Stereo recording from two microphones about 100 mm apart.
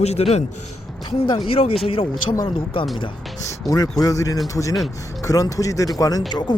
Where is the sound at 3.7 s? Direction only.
40° left (ahead or behind).